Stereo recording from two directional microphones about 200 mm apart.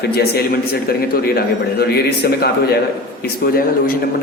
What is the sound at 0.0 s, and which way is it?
A man's voice, 50° left (ahead or behind).